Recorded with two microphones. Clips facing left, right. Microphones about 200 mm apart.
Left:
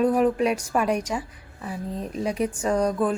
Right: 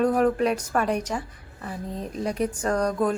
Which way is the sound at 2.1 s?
10° left (ahead or behind).